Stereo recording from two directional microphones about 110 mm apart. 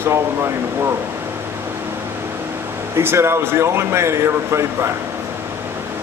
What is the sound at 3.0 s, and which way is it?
A man's voice, 20° right (ahead or behind).